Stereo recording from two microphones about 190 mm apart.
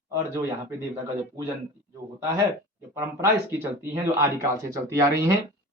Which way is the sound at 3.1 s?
10° right (ahead or behind).